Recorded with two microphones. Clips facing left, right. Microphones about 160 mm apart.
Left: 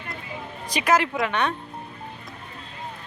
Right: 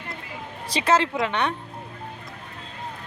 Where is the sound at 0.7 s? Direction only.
25° right (ahead or behind).